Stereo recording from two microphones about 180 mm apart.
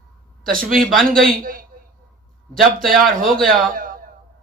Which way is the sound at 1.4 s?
50° right (ahead or behind).